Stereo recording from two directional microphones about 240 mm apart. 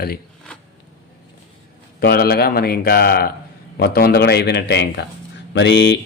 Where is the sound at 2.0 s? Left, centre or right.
Left.